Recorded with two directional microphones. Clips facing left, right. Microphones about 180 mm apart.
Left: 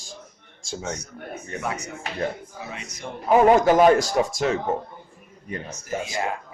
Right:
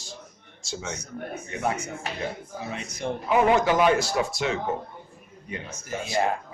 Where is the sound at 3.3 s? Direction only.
40° left (ahead or behind).